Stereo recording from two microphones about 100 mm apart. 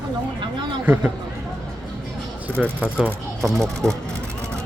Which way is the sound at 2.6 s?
10° right (ahead or behind).